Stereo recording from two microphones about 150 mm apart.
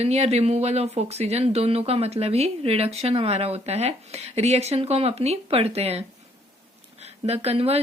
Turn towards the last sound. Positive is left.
turn(degrees=-40)  # may be behind; listen again after turning